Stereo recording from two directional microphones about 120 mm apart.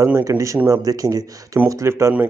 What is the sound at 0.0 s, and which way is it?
Speech, 20° right (ahead or behind).